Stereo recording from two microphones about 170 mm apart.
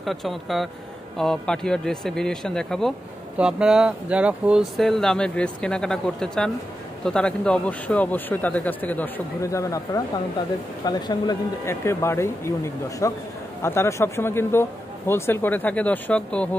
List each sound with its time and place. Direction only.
0.0 s a man's voice: centre (ahead or behind)